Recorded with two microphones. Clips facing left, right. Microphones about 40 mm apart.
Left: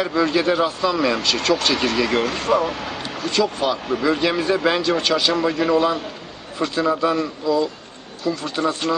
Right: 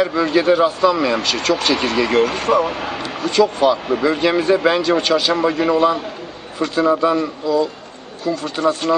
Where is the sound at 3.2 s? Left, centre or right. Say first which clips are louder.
Right 6 dB; centre.